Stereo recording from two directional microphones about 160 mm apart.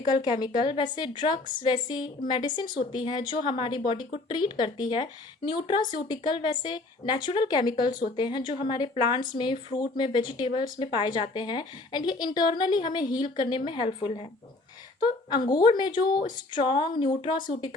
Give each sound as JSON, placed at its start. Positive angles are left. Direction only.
{"t": 0.1, "sound": "a woman's voice", "side_deg": 25}